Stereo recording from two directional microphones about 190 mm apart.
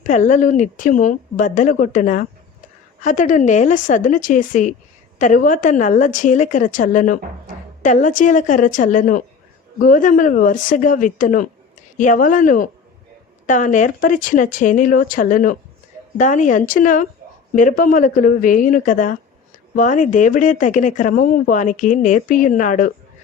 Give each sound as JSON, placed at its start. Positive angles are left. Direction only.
{"t": 0.0, "sound": "speech", "side_deg": 40}